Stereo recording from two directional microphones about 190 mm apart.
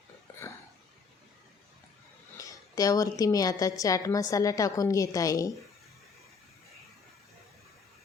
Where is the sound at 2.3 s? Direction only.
20° left (ahead or behind).